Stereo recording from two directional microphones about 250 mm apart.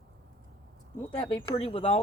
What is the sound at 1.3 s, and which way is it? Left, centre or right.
Speech, centre.